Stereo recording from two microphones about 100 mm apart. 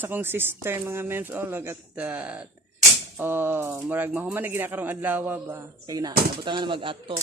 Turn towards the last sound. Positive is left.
turn(degrees=-60)  # may be behind; listen again after turning